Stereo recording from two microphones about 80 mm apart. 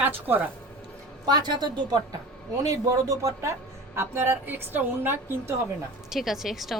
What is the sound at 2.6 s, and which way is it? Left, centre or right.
Speech, right.